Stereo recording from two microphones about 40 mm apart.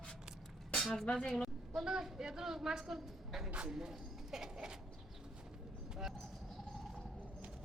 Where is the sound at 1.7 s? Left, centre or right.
Centre.